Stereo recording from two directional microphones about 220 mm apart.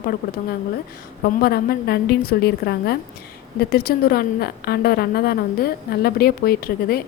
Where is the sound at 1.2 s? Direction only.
45° left (ahead or behind).